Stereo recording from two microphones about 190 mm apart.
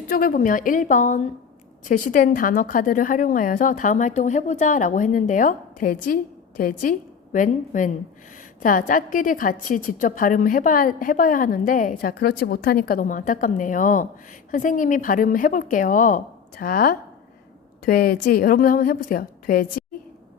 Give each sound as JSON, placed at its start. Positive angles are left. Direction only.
{"t": 0.1, "sound": "a woman's voice", "side_deg": 50}